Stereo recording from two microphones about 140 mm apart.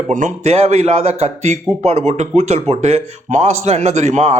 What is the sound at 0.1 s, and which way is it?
A man's voice, 60° right (ahead or behind).